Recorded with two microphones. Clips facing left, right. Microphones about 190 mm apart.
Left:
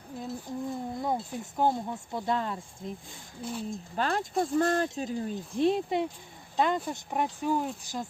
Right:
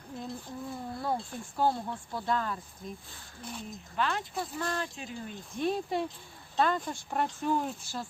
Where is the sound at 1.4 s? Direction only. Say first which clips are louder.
Left 2 dB; 20° left (ahead or behind).